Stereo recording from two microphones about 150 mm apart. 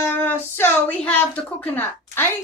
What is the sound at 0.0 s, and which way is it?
A woman's voice, 15° left (ahead or behind).